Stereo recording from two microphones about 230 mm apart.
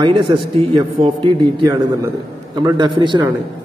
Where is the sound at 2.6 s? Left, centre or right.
Centre.